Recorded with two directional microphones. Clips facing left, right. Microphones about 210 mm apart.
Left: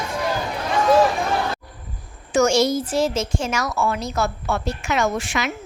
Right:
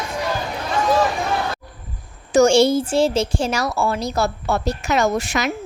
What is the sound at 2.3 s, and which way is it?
Speech, 30° right (ahead or behind).